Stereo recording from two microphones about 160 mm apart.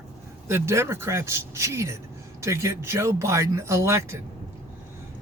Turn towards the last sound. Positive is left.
turn(degrees=-15)  # may be behind; listen again after turning